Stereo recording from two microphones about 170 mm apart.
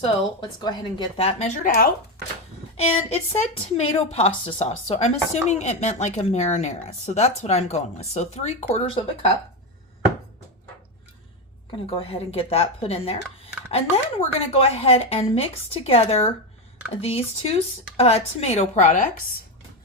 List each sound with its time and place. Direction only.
0.6 s a woman's voice: 25° left (ahead or behind)
1.6 s speech: 55° left (ahead or behind)
2.7 s a woman's voice: 40° left (ahead or behind)
11.9 s a woman's voice: 35° left (ahead or behind)